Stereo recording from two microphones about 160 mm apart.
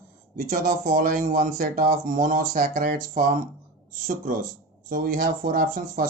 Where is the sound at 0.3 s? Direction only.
55° right (ahead or behind).